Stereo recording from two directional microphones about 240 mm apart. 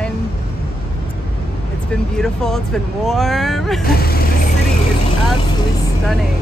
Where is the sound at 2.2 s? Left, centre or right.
Centre.